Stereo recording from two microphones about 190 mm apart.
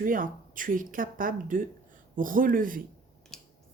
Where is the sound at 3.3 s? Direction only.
5° left (ahead or behind).